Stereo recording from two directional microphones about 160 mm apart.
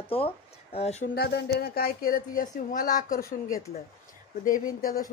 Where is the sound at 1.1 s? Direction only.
80° left.